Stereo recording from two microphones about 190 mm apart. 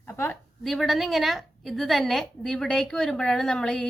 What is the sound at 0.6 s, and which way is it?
A woman's voice, centre (ahead or behind).